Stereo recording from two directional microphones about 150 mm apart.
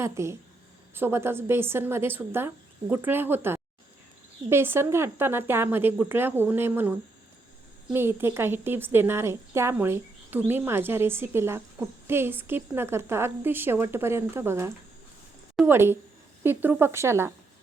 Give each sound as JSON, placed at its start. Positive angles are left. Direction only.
{"t": 0.0, "sound": "a woman's voice", "side_deg": -20}